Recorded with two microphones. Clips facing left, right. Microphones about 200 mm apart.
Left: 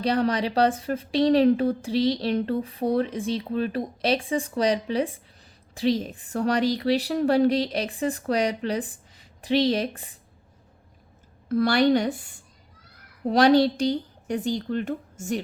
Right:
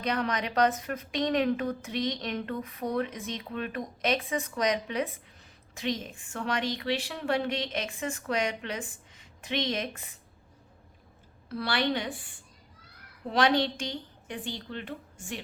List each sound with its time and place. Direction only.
0.0 s a woman's voice: 30° left (ahead or behind)
11.4 s a woman's voice: 45° left (ahead or behind)